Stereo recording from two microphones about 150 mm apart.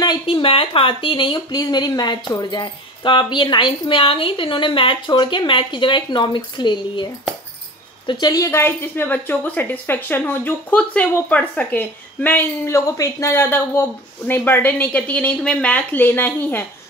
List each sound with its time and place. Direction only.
0.0 s speech: 30° left (ahead or behind)
8.1 s a woman's voice: 25° left (ahead or behind)